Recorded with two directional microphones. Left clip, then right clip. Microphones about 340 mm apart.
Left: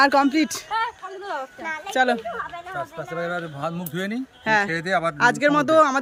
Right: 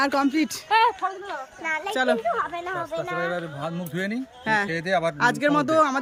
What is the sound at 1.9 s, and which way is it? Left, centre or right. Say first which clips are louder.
Speech: left 4 dB; centre.